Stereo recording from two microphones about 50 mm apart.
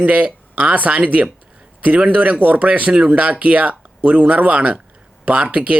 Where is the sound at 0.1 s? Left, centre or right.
Right.